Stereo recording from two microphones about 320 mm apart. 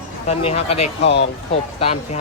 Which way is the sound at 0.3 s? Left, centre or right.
Centre.